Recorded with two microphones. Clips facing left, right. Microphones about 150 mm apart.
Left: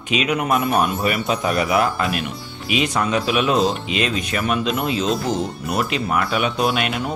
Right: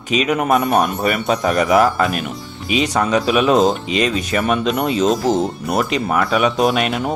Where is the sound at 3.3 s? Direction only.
45° right (ahead or behind).